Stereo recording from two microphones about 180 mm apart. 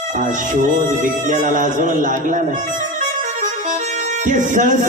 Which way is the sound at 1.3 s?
45° right (ahead or behind).